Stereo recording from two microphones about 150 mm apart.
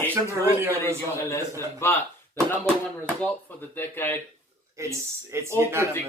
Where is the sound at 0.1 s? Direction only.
15° right (ahead or behind).